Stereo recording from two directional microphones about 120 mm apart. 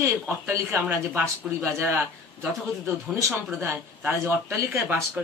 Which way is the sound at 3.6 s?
20° right (ahead or behind).